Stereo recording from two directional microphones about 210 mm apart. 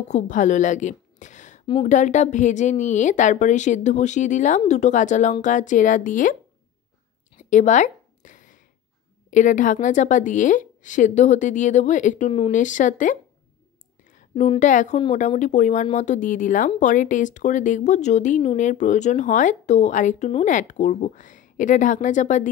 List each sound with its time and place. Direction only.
0.1 s a woman's voice: 35° left (ahead or behind)
7.3 s a sound: 35° left (ahead or behind)
9.3 s a woman's voice: 35° left (ahead or behind)